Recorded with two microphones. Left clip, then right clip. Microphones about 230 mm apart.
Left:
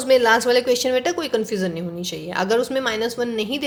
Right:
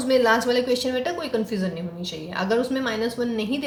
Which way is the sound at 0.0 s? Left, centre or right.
Left.